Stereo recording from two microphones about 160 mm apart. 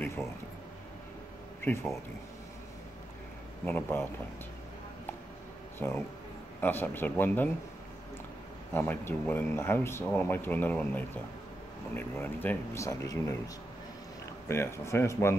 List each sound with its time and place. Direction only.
0.0 s a sound: 15° left (ahead or behind)
3.6 s speech: 15° left (ahead or behind)
5.8 s speech: 15° left (ahead or behind)
8.7 s speech: 15° left (ahead or behind)
14.5 s speech: 15° left (ahead or behind)